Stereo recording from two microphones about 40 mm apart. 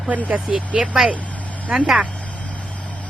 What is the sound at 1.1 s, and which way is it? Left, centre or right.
Vehicle, left.